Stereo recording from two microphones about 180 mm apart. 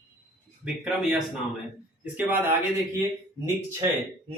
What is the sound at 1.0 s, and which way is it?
A man's voice, centre (ahead or behind).